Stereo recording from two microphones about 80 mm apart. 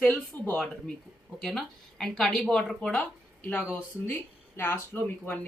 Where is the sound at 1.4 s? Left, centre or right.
Centre.